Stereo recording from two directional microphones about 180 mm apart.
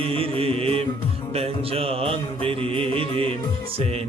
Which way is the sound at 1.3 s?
35° right (ahead or behind).